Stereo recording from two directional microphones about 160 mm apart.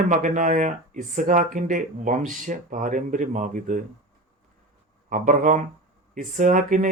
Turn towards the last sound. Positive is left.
turn(degrees=-55)  # may be behind; listen again after turning